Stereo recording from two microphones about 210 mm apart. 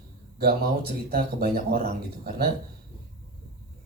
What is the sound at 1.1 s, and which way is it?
Speech, 45° right (ahead or behind).